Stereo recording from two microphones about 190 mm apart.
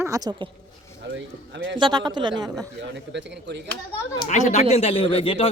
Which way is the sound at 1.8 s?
20° right (ahead or behind).